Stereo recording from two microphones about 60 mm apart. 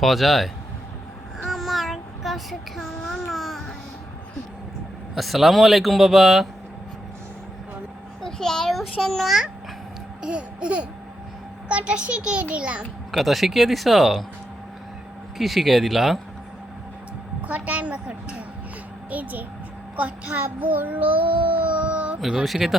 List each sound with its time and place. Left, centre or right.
0.0 s speech: centre
1.4 s child singing: centre
5.1 s speech: centre
8.2 s a child's voice: centre
10.2 s child singing: centre
13.1 s speech: centre
15.4 s speech: centre
17.4 s a sound: right
19.1 s child singing: right
21.6 s a sound: right
22.2 s speech: centre